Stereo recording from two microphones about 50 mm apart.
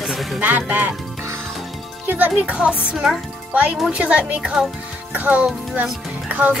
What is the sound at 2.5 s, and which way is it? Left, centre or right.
A woman's voice, right.